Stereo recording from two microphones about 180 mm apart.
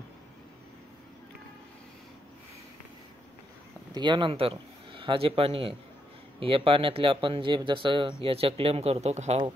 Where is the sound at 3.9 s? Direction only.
25° right (ahead or behind).